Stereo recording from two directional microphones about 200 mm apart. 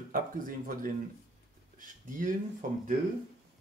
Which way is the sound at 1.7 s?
40° right (ahead or behind).